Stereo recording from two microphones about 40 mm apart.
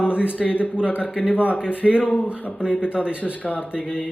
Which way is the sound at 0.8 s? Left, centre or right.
Right.